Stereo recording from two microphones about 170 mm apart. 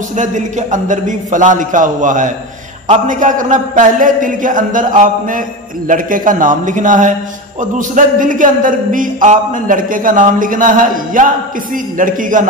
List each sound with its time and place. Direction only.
0.1 s a man's voice: 45° right (ahead or behind)